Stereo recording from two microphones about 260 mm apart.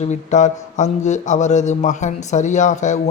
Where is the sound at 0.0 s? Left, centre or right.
Left.